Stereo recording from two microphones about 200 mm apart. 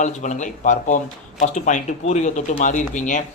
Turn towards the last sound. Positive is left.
turn(degrees=40)  # may be behind; listen again after turning